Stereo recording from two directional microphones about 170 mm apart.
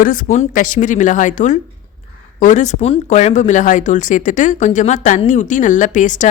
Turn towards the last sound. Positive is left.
turn(degrees=45)  # may be behind; listen again after turning